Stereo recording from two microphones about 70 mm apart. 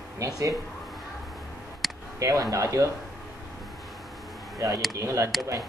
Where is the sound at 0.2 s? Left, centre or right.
Right.